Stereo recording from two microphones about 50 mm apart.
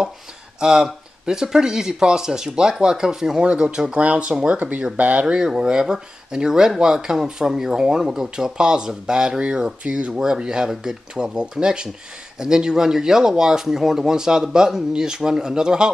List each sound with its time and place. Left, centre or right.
0.6 s speech: centre
4.6 s speech: right
5.2 s speech: centre